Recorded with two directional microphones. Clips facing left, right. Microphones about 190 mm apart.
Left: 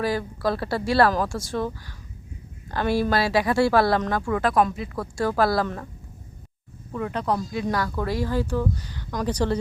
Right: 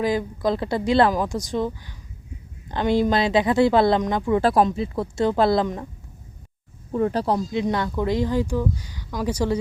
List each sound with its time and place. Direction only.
0.0 s a woman's voice: 20° right (ahead or behind)
6.9 s speech: 35° right (ahead or behind)
7.3 s speech: 20° right (ahead or behind)